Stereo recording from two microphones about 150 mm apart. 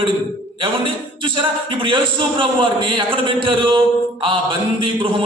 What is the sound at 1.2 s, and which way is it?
A man's voice, 35° right (ahead or behind).